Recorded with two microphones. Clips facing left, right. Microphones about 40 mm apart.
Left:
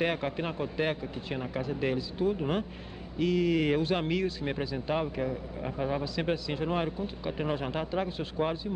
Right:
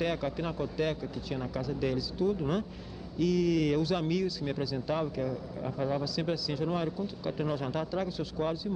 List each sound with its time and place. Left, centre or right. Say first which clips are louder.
0.0 s speech: left 2 dB; left